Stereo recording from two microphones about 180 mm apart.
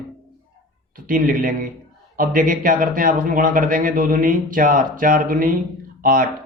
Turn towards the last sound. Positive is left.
turn(degrees=-50)  # may be behind; listen again after turning